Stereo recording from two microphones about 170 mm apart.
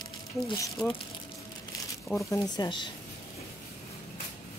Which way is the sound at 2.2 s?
20° left (ahead or behind).